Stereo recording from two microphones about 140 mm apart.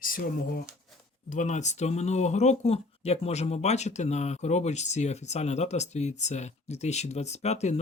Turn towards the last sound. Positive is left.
turn(degrees=50)  # may be behind; listen again after turning